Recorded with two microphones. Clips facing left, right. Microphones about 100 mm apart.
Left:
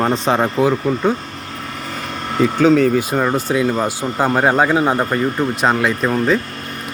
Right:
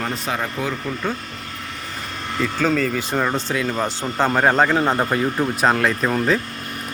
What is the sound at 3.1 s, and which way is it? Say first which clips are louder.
Speech: left 4 dB; 10° left (ahead or behind).